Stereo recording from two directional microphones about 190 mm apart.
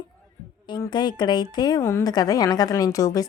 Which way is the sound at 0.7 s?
25° left (ahead or behind).